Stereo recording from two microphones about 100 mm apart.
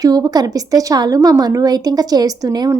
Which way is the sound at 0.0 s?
40° right (ahead or behind).